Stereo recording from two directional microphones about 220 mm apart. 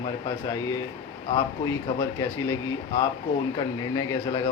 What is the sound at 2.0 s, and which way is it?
Speech, 15° left (ahead or behind).